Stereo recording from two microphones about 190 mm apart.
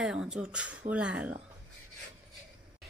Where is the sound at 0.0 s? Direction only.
5° right (ahead or behind).